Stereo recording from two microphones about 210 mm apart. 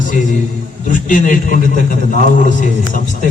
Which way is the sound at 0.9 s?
40° left (ahead or behind).